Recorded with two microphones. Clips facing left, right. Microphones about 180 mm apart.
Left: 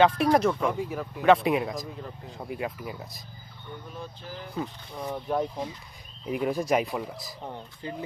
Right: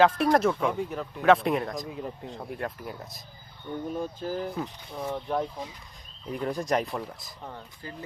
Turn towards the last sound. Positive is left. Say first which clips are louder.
# left 2 dB
turn(degrees=0)  # may be behind; listen again after turning